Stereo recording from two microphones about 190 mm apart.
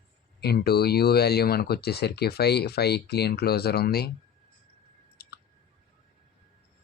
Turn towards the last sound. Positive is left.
turn(degrees=55)  # may be behind; listen again after turning